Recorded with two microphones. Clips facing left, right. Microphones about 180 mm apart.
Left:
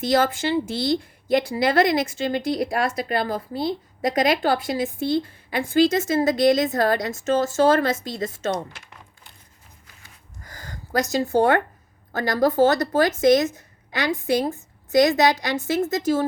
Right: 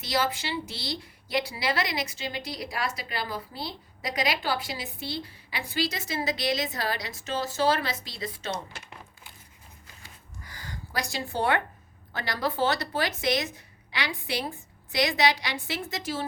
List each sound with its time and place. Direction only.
0.0 s a woman's voice: 50° left (ahead or behind)
10.4 s a sound: 45° left (ahead or behind)
12.1 s a woman's voice: 45° left (ahead or behind)